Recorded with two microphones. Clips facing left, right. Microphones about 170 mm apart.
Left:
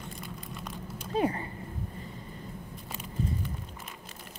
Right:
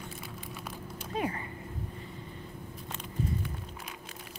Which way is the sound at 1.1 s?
35° left (ahead or behind).